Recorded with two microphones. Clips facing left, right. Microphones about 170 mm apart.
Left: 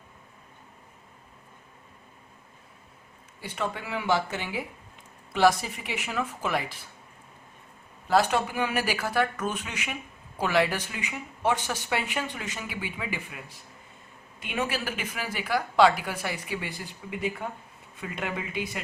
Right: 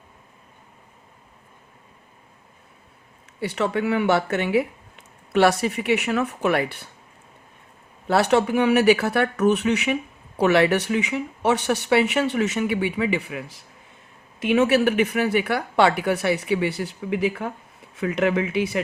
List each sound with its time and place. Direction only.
3.4 s speech: 75° right (ahead or behind)
8.0 s speech: 70° right (ahead or behind)